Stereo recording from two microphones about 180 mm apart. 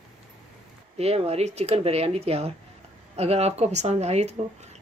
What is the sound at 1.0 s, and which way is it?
A woman's voice, 35° right (ahead or behind).